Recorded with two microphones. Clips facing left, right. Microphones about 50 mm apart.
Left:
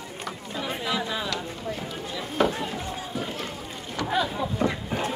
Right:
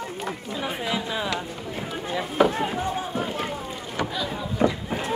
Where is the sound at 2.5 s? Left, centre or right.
Right.